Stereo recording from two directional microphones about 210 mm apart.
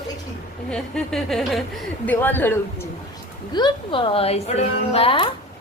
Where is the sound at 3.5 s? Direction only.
20° left (ahead or behind).